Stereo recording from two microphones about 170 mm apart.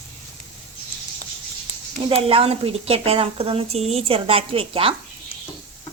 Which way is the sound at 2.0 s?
35° right (ahead or behind).